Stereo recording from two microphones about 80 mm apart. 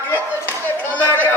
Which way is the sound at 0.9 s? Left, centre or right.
Left.